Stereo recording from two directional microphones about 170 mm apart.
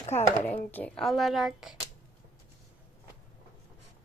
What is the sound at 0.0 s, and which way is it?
Speech, 40° left (ahead or behind).